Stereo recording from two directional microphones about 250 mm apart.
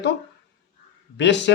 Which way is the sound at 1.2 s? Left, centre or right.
Left.